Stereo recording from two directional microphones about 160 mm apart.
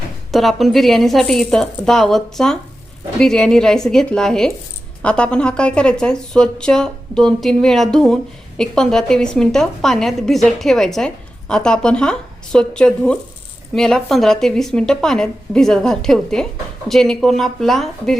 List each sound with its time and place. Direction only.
0.3 s speech: centre (ahead or behind)